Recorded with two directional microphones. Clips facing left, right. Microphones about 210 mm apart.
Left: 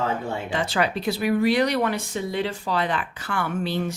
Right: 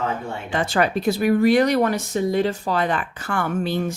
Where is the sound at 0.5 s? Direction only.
50° right (ahead or behind).